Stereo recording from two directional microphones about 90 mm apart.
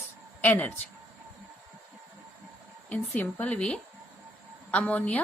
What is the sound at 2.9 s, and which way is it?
A woman's voice, 20° left (ahead or behind).